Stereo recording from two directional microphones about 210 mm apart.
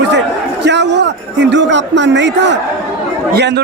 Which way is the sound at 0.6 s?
55° right (ahead or behind).